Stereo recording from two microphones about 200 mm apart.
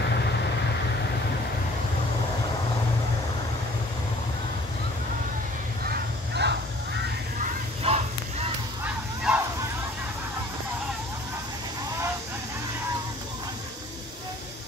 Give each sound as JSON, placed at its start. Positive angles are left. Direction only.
{"t": 5.9, "sound": "crow", "side_deg": -60}
{"t": 7.8, "sound": "honk", "side_deg": -30}
{"t": 8.8, "sound": "bow-wow", "side_deg": -10}